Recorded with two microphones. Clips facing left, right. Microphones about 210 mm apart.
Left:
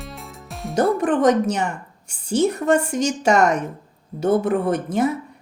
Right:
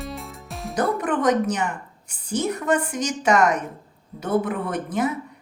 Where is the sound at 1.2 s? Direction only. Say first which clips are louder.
Left 3 dB; 30° left (ahead or behind).